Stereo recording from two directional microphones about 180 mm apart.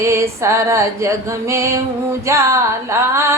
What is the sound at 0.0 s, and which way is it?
Female singing, 15° right (ahead or behind).